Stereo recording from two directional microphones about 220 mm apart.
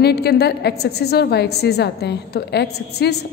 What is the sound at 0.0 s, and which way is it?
A woman's voice, 45° left (ahead or behind).